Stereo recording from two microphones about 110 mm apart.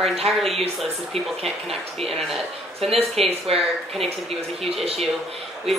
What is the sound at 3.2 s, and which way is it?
Speech, 65° right (ahead or behind).